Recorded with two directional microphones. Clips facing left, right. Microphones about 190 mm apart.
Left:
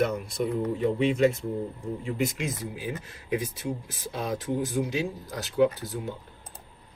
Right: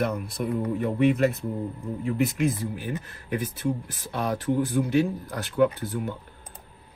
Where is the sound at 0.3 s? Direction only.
60° right (ahead or behind).